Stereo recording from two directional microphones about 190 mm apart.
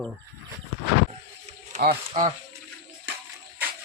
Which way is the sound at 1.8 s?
55° right (ahead or behind).